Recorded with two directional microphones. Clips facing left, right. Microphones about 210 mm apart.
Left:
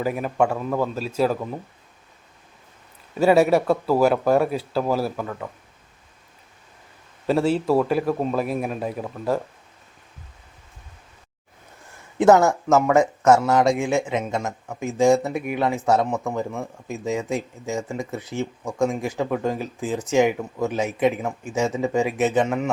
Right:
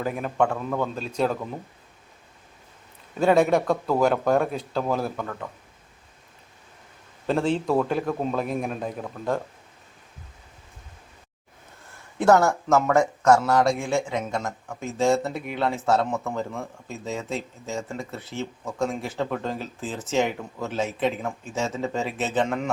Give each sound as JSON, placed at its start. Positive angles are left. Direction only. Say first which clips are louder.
{"t": 0.0, "sound": "speech", "louder": "left 2 dB", "side_deg": 5}
{"t": 3.2, "sound": "speech", "louder": "left 3 dB", "side_deg": 5}
{"t": 7.3, "sound": "speech", "louder": "left 3 dB", "side_deg": 5}
{"t": 12.1, "sound": "speech", "louder": "left 3 dB", "side_deg": 15}